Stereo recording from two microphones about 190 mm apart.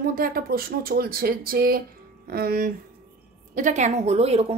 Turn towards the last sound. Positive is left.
turn(degrees=-35)  # may be behind; listen again after turning